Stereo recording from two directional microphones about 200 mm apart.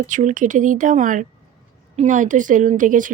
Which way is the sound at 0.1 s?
40° right (ahead or behind).